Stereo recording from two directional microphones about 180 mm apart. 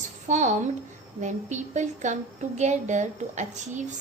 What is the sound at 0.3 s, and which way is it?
A woman's voice, 40° right (ahead or behind).